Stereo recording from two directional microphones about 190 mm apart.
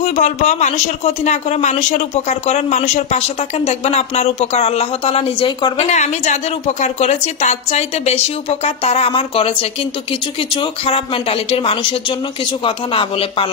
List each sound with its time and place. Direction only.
0.0 s speech: 40° left (ahead or behind)
5.9 s speech: 35° left (ahead or behind)